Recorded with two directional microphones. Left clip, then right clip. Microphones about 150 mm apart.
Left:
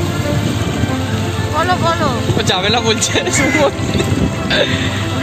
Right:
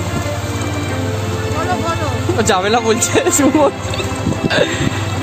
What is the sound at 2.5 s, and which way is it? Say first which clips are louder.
Speech: right 1 dB; 50° right (ahead or behind).